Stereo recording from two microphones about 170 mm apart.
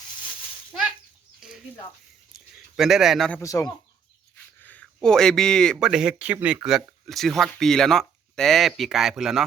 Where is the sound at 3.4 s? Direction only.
20° left (ahead or behind).